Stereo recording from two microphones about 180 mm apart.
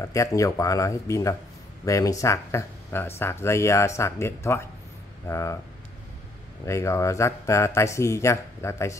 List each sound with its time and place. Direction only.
0.0 s speech: 15° left (ahead or behind)
6.6 s speech: 15° left (ahead or behind)